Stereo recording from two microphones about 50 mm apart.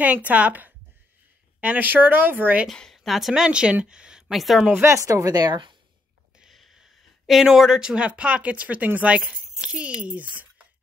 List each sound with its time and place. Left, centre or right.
0.0 s speech: right
2.9 s a woman's voice: centre
3.4 s a woman's voice: right
4.4 s a woman's voice: centre
4.8 s speech: right
6.5 s a sound: centre
7.4 s speech: centre
7.9 s a woman's voice: right